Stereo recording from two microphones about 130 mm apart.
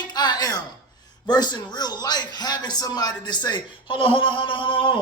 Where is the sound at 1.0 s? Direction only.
30° left (ahead or behind).